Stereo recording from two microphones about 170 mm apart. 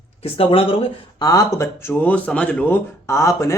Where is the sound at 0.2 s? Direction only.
35° left (ahead or behind).